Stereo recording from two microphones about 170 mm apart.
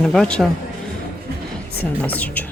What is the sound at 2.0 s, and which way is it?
Speech, 10° left (ahead or behind).